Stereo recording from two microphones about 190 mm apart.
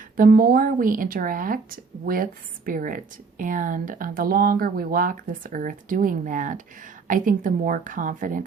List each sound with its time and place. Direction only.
0.2 s speech: 45° right (ahead or behind)